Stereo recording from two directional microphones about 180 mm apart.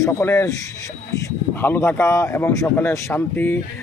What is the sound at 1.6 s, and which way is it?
Speech, 10° left (ahead or behind).